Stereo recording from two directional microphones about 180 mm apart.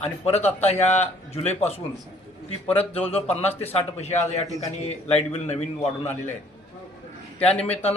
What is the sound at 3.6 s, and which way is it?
Speech, 35° left (ahead or behind).